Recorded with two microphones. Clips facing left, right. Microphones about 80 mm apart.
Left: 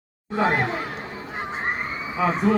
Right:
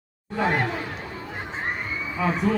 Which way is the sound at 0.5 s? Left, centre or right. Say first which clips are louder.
Left 1 dB; left.